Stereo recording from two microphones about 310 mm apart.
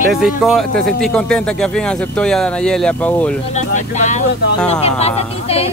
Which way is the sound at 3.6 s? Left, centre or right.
Left.